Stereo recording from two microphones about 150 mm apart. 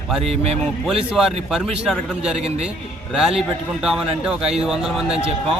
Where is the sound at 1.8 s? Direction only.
5° right (ahead or behind).